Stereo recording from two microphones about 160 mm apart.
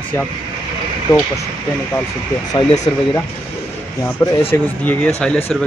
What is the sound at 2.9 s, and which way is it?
Speech, 30° left (ahead or behind).